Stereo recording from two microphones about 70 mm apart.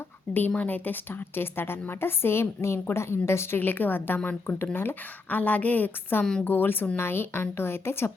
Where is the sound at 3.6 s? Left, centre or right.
Left.